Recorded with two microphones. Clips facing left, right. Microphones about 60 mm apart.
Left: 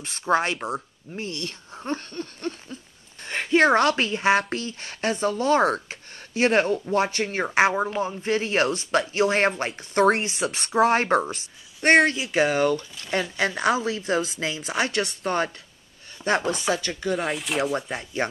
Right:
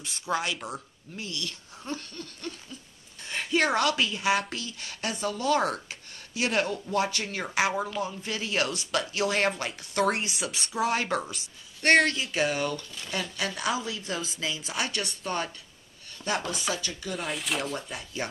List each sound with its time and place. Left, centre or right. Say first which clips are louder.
0.0 s speech: left 7 dB; left
10.4 s speech: left 10 dB; left
11.8 s speech: left 4 dB; centre
13.1 s speech: left 7 dB; left
13.6 s speech: left 7 dB; left
17.2 s speech: left 4 dB; centre